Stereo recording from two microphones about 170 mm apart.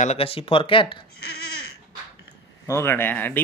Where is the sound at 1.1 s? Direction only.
65° left (ahead or behind).